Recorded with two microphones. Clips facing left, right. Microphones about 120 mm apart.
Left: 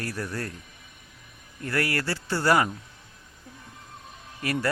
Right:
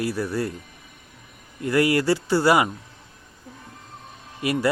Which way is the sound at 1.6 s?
15° right (ahead or behind).